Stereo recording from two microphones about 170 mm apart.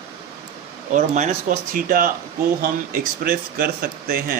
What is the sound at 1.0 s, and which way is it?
Speech, 45° right (ahead or behind).